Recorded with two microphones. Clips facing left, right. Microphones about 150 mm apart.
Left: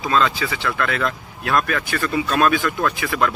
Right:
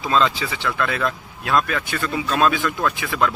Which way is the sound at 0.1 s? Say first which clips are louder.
Even; 25° right (ahead or behind).